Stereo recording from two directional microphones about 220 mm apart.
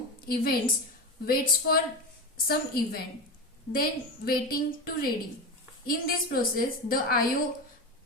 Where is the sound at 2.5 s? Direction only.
40° left (ahead or behind).